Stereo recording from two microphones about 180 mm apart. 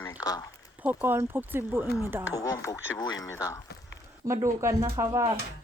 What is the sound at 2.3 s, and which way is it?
Speech, 20° left (ahead or behind).